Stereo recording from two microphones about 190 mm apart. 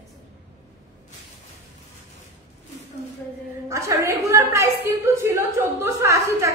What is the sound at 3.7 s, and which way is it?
A woman's voice, 15° right (ahead or behind).